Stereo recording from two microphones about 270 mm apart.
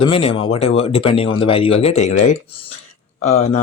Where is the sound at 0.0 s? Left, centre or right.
Left.